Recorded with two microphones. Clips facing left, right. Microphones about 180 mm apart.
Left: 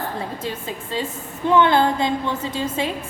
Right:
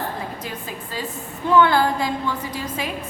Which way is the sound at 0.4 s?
25° left (ahead or behind).